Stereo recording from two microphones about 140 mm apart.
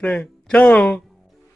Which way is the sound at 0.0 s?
10° left (ahead or behind).